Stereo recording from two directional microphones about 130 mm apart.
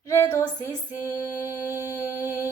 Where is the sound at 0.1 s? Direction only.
25° left (ahead or behind).